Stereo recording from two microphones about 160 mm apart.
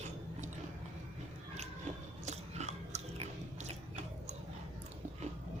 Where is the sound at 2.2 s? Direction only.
45° right (ahead or behind).